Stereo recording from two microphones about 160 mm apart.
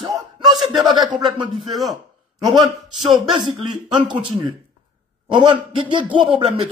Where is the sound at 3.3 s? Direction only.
30° right (ahead or behind).